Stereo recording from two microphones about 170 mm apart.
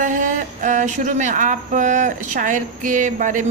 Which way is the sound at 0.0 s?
50° right (ahead or behind).